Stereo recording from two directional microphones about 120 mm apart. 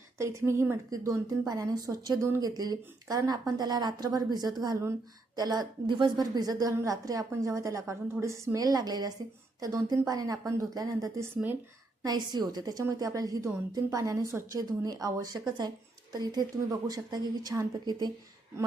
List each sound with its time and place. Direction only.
0.2 s a woman's voice: 25° right (ahead or behind)